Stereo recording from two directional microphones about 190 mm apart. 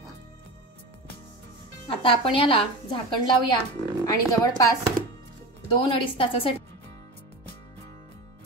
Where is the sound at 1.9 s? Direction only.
30° left (ahead or behind).